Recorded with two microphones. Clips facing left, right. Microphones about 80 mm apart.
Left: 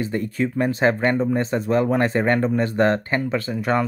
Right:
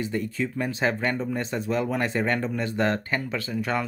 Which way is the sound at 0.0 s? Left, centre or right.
Left.